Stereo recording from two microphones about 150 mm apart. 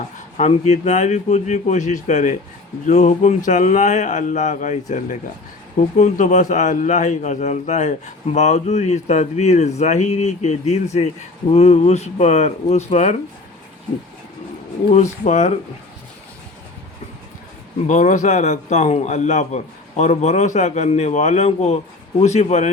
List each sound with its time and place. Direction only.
0.3 s a man's voice: 50° left (ahead or behind)
14.9 s a man's voice: 50° left (ahead or behind)
17.8 s a man's voice: 55° left (ahead or behind)